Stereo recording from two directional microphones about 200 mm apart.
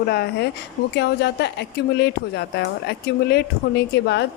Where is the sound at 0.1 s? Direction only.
55° left (ahead or behind).